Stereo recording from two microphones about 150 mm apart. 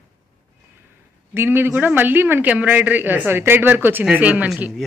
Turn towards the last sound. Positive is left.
turn(degrees=-10)  # may be behind; listen again after turning